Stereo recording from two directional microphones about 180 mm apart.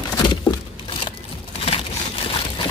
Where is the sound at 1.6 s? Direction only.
30° left (ahead or behind).